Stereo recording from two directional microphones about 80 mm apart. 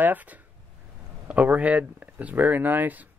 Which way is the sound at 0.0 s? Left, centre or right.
Right.